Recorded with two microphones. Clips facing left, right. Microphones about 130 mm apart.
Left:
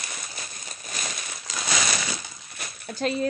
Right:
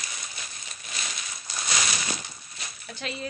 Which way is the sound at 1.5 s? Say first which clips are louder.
Left 3 dB; 90° left.